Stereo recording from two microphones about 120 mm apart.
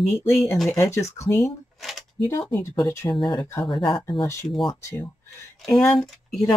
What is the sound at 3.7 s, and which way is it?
Speech, 40° left (ahead or behind).